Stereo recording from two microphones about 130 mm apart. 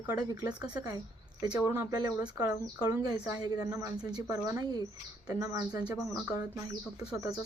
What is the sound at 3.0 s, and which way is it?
Speech, 30° right (ahead or behind).